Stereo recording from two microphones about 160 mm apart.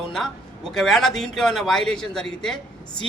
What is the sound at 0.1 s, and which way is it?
Speech, centre (ahead or behind).